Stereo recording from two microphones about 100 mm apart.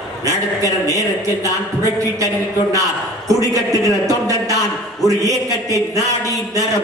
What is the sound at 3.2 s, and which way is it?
A man's voice, 35° right (ahead or behind).